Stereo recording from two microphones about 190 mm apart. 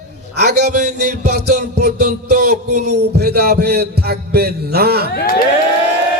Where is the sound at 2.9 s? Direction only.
55° right (ahead or behind).